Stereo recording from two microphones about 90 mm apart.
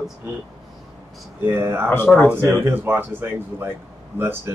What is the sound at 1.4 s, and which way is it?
Speech, 25° right (ahead or behind).